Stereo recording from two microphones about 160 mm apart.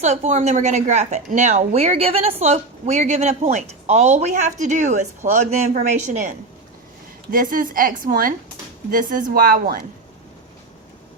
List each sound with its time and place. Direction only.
0.0 s speech: 45° right (ahead or behind)
7.3 s a woman's voice: 60° right (ahead or behind)